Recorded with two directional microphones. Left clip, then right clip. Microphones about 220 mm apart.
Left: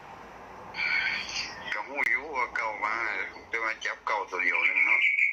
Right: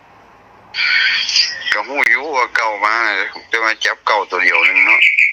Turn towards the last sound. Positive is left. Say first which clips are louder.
# right 13 dB
turn(degrees=-50)  # may be behind; listen again after turning